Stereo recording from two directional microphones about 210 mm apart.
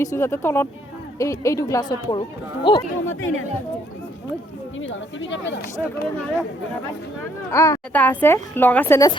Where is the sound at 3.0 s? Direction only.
70° left (ahead or behind).